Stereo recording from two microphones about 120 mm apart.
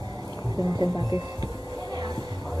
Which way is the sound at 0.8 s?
35° right (ahead or behind).